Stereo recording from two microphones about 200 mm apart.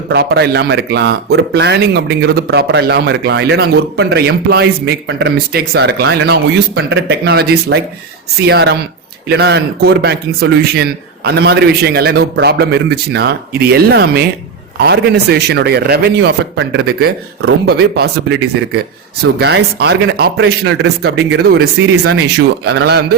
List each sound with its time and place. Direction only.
0.1 s speech: 55° right (ahead or behind)